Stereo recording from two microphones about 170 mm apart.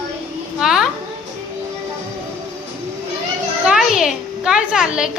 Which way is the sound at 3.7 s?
Centre (ahead or behind).